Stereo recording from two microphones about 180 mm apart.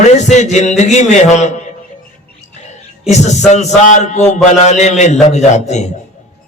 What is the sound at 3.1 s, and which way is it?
A man's voice, 40° left (ahead or behind).